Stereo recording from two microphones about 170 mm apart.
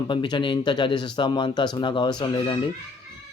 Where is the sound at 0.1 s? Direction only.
30° left (ahead or behind).